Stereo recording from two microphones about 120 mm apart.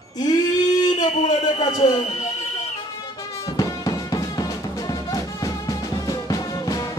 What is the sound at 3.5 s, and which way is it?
Music, 30° left (ahead or behind).